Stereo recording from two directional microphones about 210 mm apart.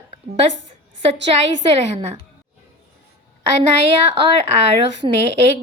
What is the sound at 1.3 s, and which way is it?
Speech, 30° right (ahead or behind).